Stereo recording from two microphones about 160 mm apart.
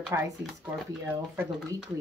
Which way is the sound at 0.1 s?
15° right (ahead or behind).